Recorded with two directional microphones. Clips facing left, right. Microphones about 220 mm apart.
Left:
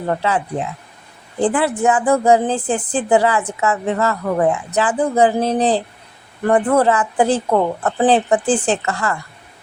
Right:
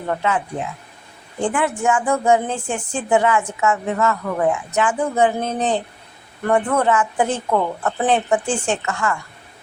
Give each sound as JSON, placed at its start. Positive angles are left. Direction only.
{"t": 0.1, "sound": "a woman's voice", "side_deg": 35}